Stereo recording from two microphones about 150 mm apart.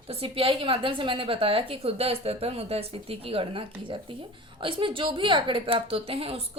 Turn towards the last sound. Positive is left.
turn(degrees=-40)  # may be behind; listen again after turning